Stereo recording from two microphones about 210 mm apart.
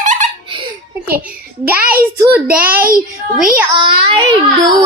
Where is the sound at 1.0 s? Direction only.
45° right (ahead or behind).